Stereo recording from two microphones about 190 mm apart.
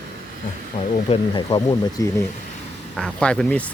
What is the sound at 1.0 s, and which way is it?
Speech, 25° left (ahead or behind).